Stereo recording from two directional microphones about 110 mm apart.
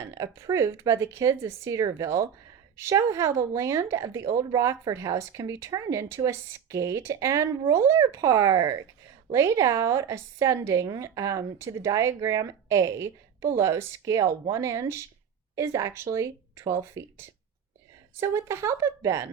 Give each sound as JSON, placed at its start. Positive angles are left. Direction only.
{"t": 0.1, "sound": "a woman's voice", "side_deg": -30}